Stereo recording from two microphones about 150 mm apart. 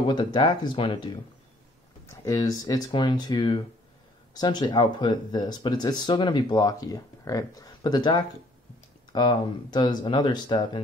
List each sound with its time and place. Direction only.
0.1 s speech: 30° left (ahead or behind)
2.2 s speech: 25° left (ahead or behind)